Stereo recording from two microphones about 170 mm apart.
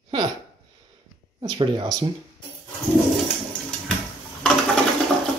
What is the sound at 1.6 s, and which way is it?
Speech, 25° right (ahead or behind).